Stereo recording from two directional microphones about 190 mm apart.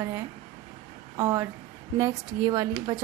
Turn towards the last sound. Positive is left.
turn(degrees=-20)  # may be behind; listen again after turning